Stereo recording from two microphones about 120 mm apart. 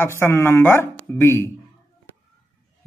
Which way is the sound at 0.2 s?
20° left (ahead or behind).